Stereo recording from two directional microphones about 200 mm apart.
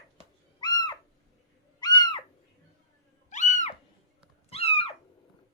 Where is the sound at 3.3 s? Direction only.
35° left (ahead or behind).